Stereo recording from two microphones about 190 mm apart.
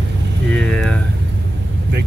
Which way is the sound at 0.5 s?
5° left (ahead or behind).